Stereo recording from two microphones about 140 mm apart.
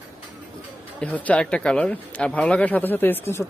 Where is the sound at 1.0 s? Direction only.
10° left (ahead or behind).